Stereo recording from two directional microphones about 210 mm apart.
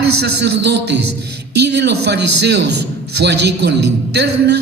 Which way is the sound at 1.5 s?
50° right (ahead or behind).